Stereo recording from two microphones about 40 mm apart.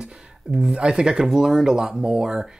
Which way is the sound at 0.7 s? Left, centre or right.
Right.